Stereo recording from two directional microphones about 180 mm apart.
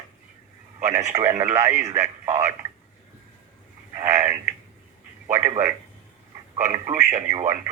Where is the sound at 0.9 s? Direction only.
20° right (ahead or behind).